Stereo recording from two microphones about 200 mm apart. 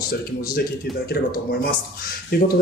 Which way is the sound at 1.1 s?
55° left (ahead or behind).